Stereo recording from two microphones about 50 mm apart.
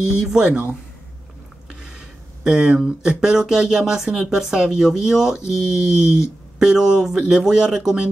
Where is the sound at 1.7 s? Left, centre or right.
Centre.